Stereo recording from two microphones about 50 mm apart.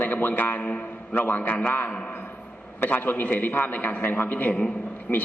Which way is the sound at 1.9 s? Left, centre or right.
Left.